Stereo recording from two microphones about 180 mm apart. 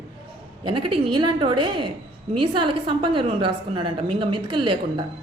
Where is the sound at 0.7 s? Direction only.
30° right (ahead or behind).